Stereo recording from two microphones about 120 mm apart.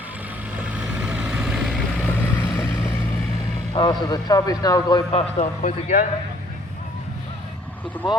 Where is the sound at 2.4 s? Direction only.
20° left (ahead or behind).